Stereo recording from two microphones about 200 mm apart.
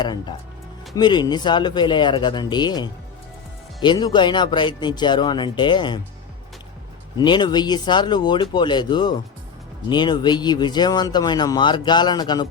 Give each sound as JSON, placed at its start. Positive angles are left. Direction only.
{"t": 0.0, "sound": "speech", "side_deg": 20}
{"t": 7.2, "sound": "speech", "side_deg": 20}